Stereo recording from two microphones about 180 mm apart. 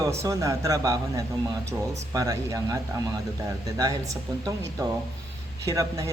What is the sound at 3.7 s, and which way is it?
Speech, 20° right (ahead or behind).